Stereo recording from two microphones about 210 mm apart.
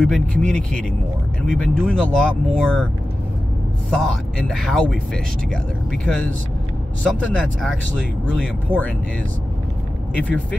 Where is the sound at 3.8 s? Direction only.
Centre (ahead or behind).